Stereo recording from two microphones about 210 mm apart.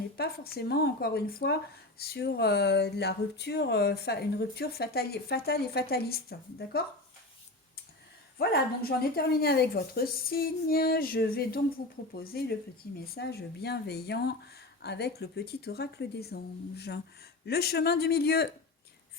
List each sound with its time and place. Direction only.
0.2 s speech: 50° left (ahead or behind)
8.4 s speech: 50° left (ahead or behind)